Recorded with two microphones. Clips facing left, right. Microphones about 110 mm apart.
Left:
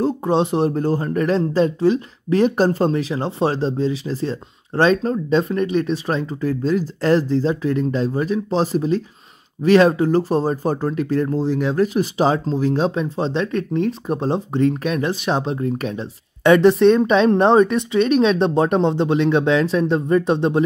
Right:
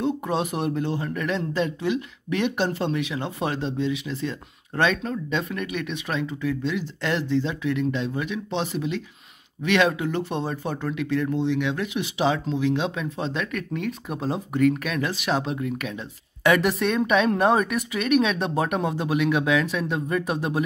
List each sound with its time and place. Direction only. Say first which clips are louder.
0.0 s speech: left 6 dB; 30° left (ahead or behind)